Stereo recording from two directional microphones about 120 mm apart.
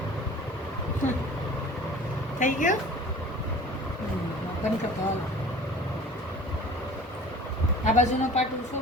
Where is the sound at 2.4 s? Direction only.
90° left.